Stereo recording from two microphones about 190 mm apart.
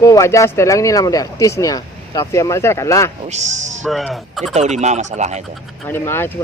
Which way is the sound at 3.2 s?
40° right (ahead or behind).